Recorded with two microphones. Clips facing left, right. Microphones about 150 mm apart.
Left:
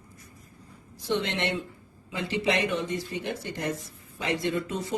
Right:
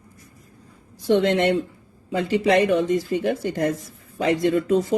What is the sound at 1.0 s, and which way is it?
Speech, 45° right (ahead or behind).